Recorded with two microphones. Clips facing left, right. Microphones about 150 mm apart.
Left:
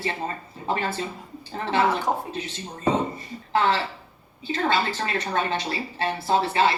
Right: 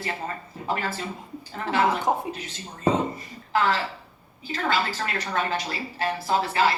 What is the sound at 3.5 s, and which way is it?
A woman's voice, 25° left (ahead or behind).